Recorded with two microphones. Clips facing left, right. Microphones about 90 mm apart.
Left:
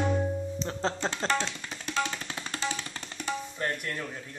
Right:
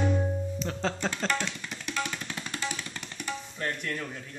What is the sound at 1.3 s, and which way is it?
Music, 30° left (ahead or behind).